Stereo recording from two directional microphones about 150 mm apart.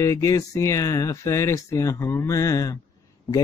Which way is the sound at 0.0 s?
20° left (ahead or behind).